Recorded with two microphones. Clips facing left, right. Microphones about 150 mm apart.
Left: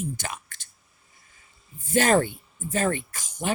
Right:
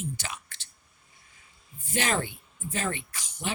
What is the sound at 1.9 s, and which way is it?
Speech, 50° left (ahead or behind).